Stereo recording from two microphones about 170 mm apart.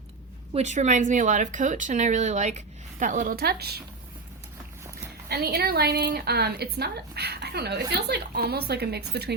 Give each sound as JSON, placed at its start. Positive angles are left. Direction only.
{"t": 0.5, "sound": "speech", "side_deg": -40}
{"t": 5.3, "sound": "a woman's voice", "side_deg": -65}